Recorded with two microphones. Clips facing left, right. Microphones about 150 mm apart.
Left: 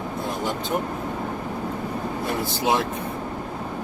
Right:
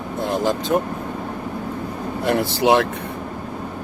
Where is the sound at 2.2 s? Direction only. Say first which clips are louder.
Right 8 dB; 80° right.